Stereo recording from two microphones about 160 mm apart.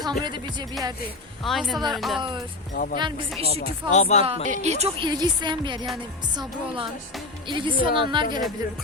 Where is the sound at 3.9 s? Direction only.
45° left (ahead or behind).